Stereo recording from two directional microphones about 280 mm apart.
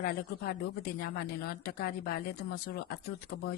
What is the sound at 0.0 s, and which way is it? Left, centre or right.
Speech, left.